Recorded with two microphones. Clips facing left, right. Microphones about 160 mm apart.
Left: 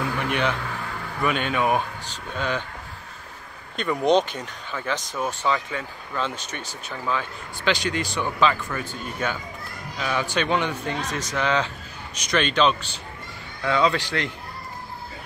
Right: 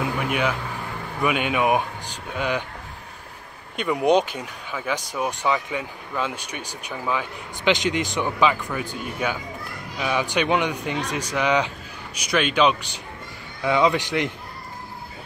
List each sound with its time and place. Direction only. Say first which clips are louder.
0.0 s a sound: right 1 dB; 10° right (ahead or behind)
1.2 s speech: right 2 dB; 10° right (ahead or behind)
3.7 s speech: right 1 dB; 10° right (ahead or behind)